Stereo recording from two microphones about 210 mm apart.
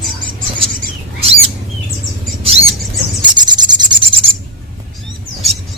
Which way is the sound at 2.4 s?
25° right (ahead or behind).